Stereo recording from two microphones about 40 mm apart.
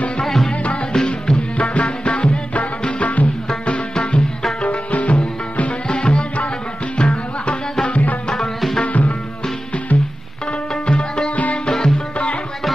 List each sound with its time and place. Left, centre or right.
0.2 s music: centre
1.3 s music: left
5.9 s music: left
7.9 s music: left
10.9 s music: left